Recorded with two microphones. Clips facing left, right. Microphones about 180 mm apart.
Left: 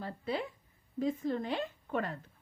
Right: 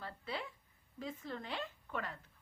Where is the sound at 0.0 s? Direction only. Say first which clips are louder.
Left 8 dB; 45° left (ahead or behind).